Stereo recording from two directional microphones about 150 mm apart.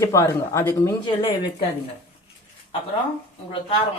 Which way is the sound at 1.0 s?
30° left (ahead or behind).